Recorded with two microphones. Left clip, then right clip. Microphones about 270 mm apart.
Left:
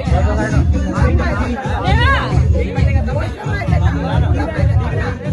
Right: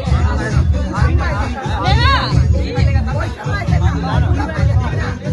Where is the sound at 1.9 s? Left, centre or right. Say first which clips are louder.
Right 1 dB; right.